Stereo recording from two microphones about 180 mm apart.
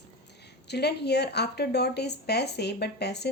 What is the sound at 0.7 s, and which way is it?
Speech, 65° left (ahead or behind).